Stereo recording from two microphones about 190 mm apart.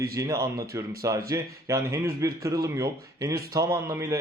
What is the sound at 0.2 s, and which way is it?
A man's voice, 15° right (ahead or behind).